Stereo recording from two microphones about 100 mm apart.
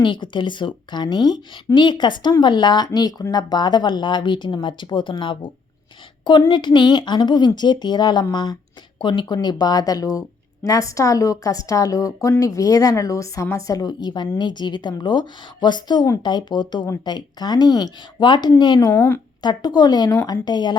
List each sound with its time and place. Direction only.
0.0 s speech: 50° left (ahead or behind)
6.5 s a woman's voice: 50° left (ahead or behind); by 19.2 s 30° left (ahead or behind)
19.4 s speech: 45° left (ahead or behind)